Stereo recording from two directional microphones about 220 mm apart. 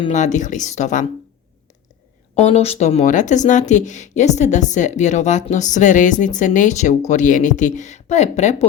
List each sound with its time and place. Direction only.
0.0 s speech: 30° left (ahead or behind)
2.3 s speech: 30° left (ahead or behind)